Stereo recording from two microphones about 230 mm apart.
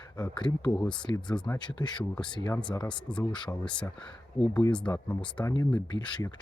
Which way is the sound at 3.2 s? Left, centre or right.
Centre.